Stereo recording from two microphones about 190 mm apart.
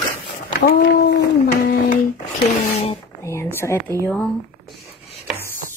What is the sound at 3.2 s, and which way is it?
Speech, 15° left (ahead or behind).